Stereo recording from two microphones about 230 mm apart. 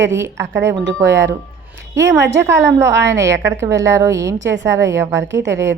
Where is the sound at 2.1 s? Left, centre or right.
Right.